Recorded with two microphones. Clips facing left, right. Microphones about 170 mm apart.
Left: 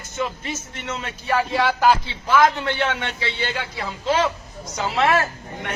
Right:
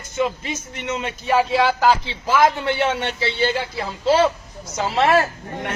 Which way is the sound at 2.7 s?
30° right (ahead or behind).